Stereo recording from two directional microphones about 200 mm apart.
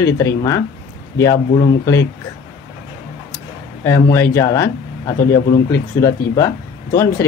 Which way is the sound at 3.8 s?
15° left (ahead or behind).